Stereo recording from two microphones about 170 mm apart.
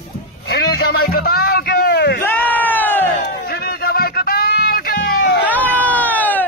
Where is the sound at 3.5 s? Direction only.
65° left (ahead or behind).